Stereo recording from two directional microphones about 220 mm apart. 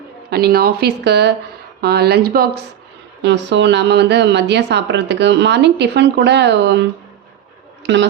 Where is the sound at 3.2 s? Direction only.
55° right (ahead or behind).